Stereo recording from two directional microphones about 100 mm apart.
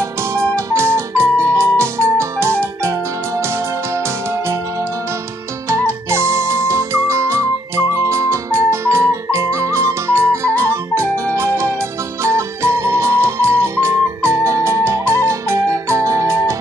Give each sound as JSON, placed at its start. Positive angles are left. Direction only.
{"t": 0.3, "sound": "music", "side_deg": -25}
{"t": 5.7, "sound": "music", "side_deg": -25}